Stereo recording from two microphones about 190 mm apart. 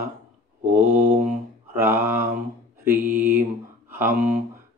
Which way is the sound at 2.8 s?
10° right (ahead or behind).